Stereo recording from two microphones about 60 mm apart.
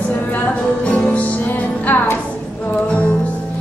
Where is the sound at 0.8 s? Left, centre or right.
Left.